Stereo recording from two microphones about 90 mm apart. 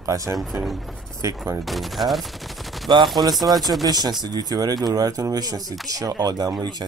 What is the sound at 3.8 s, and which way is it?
Speech, 50° right (ahead or behind).